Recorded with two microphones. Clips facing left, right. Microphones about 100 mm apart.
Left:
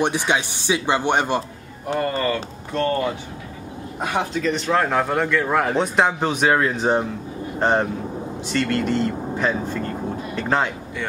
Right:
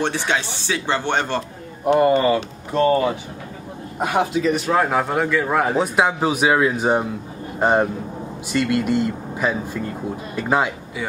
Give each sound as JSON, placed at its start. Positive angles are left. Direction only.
{"t": 0.0, "sound": "speech", "side_deg": 15}
{"t": 1.9, "sound": "a man's voice", "side_deg": -20}
{"t": 4.0, "sound": "a man's voice", "side_deg": -10}